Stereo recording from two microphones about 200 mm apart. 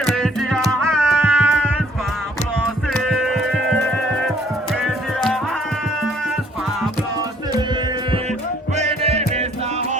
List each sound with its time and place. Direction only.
0.0 s music: centre (ahead or behind)
2.9 s music: centre (ahead or behind)
8.7 s music: 35° right (ahead or behind)